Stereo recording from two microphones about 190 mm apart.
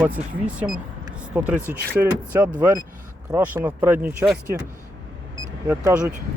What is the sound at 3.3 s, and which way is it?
Speech, 10° right (ahead or behind).